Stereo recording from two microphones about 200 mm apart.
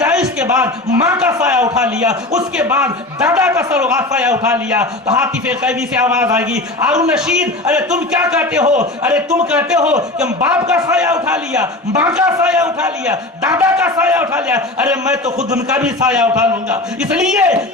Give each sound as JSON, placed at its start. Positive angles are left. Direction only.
{"t": 0.0, "sound": "a man's voice", "side_deg": -5}
{"t": 8.6, "sound": "a man's voice", "side_deg": -35}
{"t": 9.0, "sound": "a man's voice", "side_deg": -5}